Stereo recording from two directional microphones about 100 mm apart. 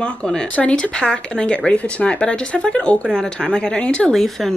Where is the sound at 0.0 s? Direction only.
10° left (ahead or behind).